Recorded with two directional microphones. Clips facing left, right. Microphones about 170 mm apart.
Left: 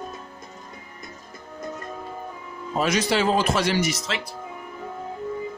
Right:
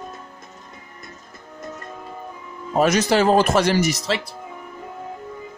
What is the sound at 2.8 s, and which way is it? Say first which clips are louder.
Speech: right 5 dB; 45° right (ahead or behind).